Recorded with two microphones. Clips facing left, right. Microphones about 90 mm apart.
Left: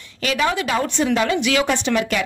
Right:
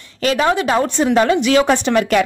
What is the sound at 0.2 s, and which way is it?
A woman's voice, 35° right (ahead or behind).